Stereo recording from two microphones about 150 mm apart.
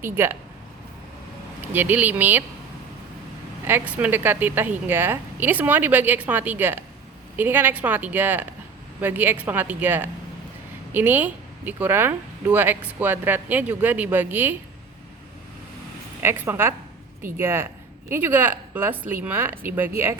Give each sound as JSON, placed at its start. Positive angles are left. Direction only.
{"t": 0.0, "sound": "speech", "side_deg": -15}
{"t": 1.7, "sound": "speech", "side_deg": -15}
{"t": 3.7, "sound": "speech", "side_deg": -10}
{"t": 16.2, "sound": "speech", "side_deg": -15}